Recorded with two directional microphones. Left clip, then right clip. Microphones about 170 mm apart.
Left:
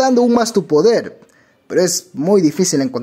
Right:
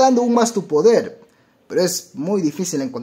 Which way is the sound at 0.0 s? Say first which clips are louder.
Left 1 dB; 30° left (ahead or behind).